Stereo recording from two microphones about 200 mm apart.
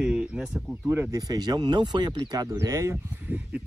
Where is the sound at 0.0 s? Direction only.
5° right (ahead or behind).